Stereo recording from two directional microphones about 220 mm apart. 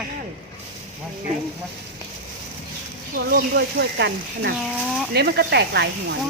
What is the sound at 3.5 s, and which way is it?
Speech, 50° right (ahead or behind).